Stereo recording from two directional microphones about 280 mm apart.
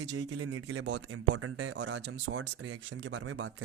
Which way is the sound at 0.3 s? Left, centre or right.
Right.